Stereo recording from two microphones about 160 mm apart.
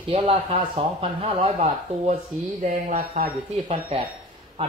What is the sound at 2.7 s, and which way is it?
Speech, 55° right (ahead or behind).